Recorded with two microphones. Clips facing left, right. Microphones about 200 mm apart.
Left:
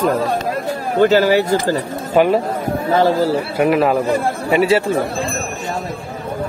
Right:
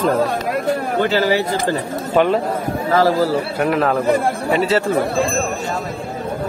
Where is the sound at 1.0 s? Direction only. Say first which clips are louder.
Left 7 dB; 45° left (ahead or behind).